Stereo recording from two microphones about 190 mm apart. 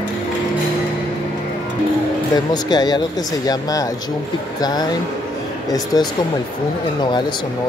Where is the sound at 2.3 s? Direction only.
20° left (ahead or behind).